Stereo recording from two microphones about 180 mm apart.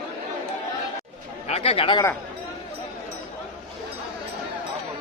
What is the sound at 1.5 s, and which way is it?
Speech, 35° left (ahead or behind).